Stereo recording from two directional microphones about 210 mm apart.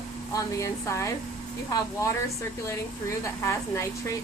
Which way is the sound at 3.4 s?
15° left (ahead or behind).